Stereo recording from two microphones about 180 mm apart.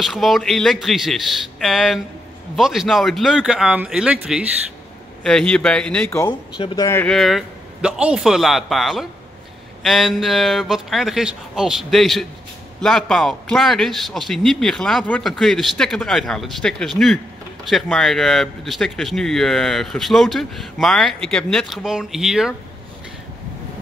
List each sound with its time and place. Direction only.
0.0 s speech: centre (ahead or behind)
5.2 s speech: 5° left (ahead or behind)
6.6 s speech: 25° left (ahead or behind)
6.9 s speech: 5° left (ahead or behind)